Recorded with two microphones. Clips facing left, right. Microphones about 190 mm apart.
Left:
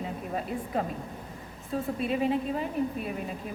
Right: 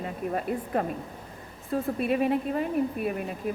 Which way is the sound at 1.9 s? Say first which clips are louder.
Right 2 dB; 55° right (ahead or behind).